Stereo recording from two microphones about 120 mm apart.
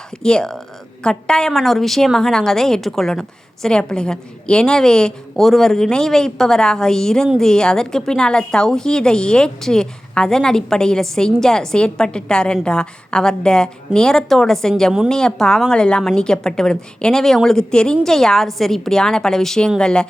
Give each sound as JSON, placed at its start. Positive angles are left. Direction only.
{"t": 0.2, "sound": "a woman's voice", "side_deg": 5}